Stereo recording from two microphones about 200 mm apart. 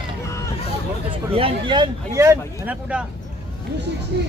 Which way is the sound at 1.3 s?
25° right (ahead or behind).